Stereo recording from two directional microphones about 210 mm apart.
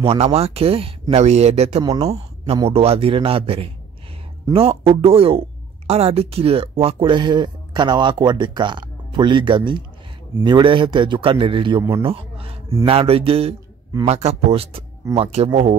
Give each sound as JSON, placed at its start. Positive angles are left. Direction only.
{"t": 0.0, "sound": "speech", "side_deg": -30}